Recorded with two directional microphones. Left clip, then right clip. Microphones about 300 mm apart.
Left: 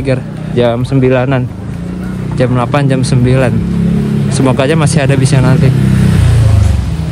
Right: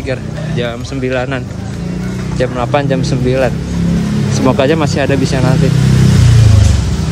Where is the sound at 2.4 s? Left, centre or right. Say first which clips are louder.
Left 2 dB; left.